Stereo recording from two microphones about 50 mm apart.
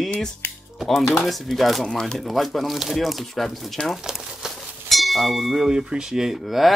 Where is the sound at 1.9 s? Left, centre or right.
Centre.